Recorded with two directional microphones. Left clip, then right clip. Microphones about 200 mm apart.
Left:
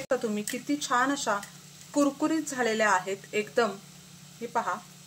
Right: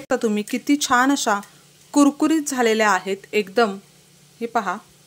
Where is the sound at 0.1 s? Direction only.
55° right (ahead or behind).